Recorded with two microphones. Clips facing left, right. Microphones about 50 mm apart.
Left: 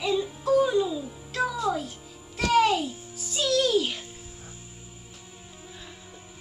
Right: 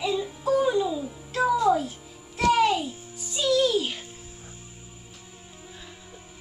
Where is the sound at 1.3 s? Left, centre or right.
Right.